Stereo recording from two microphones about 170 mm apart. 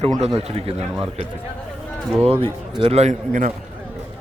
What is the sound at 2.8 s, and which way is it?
Speech, 40° right (ahead or behind).